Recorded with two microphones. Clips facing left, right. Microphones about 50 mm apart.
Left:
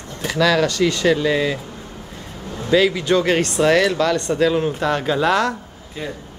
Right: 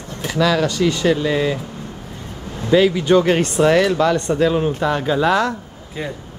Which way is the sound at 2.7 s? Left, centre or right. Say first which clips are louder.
Right 3 dB; centre.